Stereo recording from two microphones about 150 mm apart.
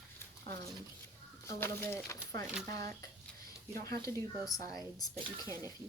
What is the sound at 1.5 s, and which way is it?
Speech, 15° left (ahead or behind).